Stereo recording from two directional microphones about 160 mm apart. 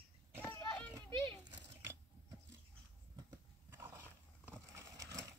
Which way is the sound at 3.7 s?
15° right (ahead or behind).